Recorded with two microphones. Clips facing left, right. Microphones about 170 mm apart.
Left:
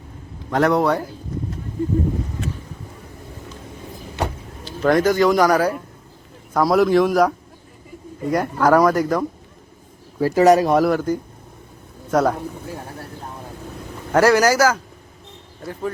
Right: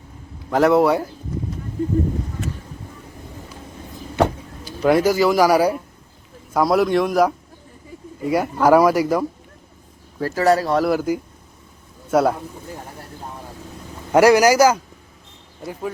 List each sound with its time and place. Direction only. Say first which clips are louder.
0.5 s a man's voice: right 2 dB; 5° right (ahead or behind)
4.6 s a man's voice: even; 10° right (ahead or behind)
10.2 s speech: left 4 dB; 15° left (ahead or behind)
10.8 s a man's voice: even; 5° right (ahead or behind)
14.1 s a man's voice: right 2 dB; 15° right (ahead or behind)